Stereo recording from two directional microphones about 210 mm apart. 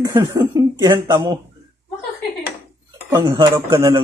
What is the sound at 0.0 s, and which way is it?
Speech, 15° right (ahead or behind).